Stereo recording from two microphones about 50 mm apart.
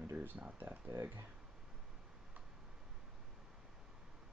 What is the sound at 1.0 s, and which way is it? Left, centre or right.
Speech, right.